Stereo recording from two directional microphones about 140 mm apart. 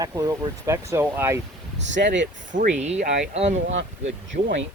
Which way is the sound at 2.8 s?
50° right (ahead or behind).